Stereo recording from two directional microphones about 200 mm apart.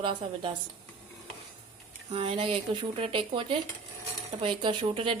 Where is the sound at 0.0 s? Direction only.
25° right (ahead or behind).